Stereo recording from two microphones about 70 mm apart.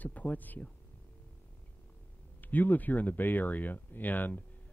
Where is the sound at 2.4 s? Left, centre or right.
Left.